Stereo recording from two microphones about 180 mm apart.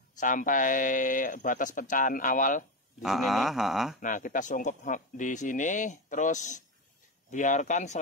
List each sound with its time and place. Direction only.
0.2 s speech: 45° left (ahead or behind)
3.0 s speech: centre (ahead or behind)
4.0 s speech: 50° left (ahead or behind)